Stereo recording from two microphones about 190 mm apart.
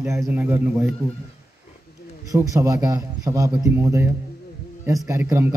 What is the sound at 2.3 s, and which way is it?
A man's voice, 15° right (ahead or behind).